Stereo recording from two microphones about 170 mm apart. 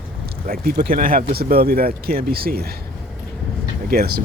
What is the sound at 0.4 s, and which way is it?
Speech, 60° right (ahead or behind).